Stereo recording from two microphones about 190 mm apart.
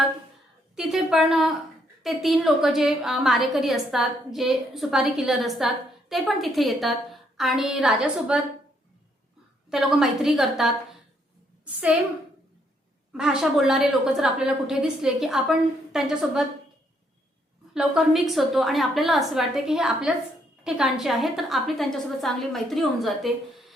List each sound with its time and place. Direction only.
0.8 s a sound: centre (ahead or behind)
2.0 s a woman's voice: centre (ahead or behind)
9.6 s a woman's voice: 5° right (ahead or behind)
13.1 s a woman's voice: 5° right (ahead or behind)
17.7 s a woman's voice: centre (ahead or behind)